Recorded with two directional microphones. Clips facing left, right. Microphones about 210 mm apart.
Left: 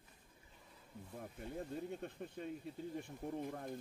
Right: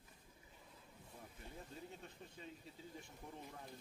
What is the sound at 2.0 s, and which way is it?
A man's voice, 55° left (ahead or behind).